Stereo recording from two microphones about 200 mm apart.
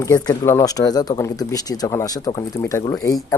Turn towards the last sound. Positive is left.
turn(degrees=15)  # may be behind; listen again after turning